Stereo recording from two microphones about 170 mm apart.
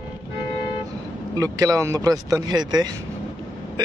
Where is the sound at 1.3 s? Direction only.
20° right (ahead or behind).